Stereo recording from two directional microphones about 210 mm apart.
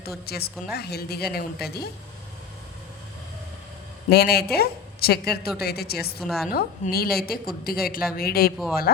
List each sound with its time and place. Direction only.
0.3 s a woman's voice: 50° left (ahead or behind)
4.1 s a woman's voice: 50° left (ahead or behind)
6.1 s a woman's voice: centre (ahead or behind)
6.5 s a woman's voice: 45° left (ahead or behind)